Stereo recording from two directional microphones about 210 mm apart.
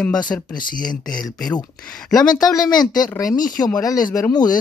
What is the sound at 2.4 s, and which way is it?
Speech, 20° left (ahead or behind).